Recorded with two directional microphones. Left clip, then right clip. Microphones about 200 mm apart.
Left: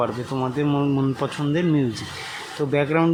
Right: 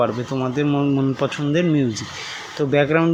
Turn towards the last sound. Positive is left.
turn(degrees=-10)  # may be behind; listen again after turning